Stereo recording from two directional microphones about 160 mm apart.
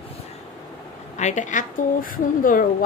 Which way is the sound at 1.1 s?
50° left (ahead or behind).